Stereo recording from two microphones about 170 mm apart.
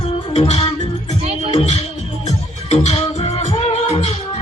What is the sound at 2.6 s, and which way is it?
Music, 40° left (ahead or behind).